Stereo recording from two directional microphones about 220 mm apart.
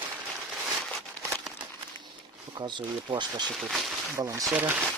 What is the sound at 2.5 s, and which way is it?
Speech, 20° right (ahead or behind).